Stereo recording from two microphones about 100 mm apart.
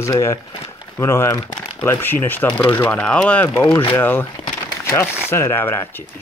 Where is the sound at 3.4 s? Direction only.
25° left (ahead or behind).